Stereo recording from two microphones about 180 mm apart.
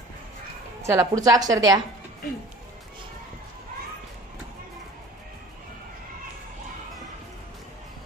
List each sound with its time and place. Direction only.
0.8 s a woman's voice: 20° right (ahead or behind)